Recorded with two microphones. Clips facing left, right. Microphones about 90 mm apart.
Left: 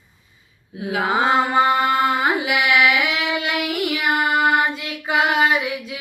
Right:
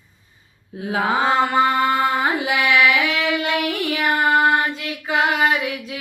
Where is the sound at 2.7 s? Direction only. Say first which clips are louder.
Right 1 dB; 15° left (ahead or behind).